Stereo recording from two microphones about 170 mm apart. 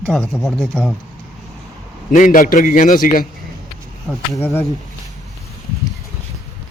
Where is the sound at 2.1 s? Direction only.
50° left (ahead or behind).